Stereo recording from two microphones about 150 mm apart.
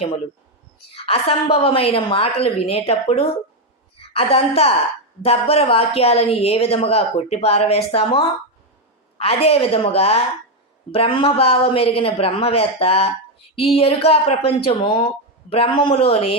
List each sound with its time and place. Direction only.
0.9 s speech: 40° left (ahead or behind)